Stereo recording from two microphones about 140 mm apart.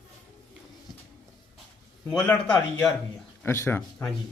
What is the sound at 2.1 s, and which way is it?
Speech, 20° left (ahead or behind).